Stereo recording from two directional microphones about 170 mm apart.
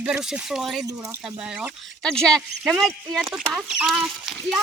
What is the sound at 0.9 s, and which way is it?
Speech, 20° right (ahead or behind).